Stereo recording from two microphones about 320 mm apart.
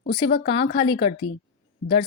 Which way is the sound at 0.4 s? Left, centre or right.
Centre.